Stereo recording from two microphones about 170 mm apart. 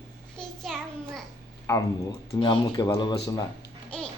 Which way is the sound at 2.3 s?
30° left (ahead or behind).